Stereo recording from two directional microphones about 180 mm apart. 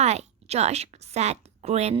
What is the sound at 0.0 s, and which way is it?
A woman's voice, 40° right (ahead or behind).